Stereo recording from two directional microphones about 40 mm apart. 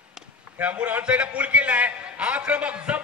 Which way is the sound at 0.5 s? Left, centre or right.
Right.